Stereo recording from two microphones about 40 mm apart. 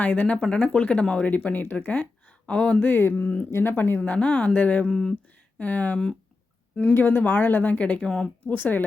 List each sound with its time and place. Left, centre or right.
0.0 s speech: left
1.3 s speech: left
2.9 s speech: left
3.5 s speech: left
3.9 s speech: left
4.9 s speech: centre
5.5 s speech: left
6.9 s speech: left
8.0 s speech: left
8.4 s speech: left